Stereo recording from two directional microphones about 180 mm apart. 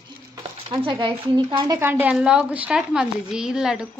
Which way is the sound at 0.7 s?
25° right (ahead or behind).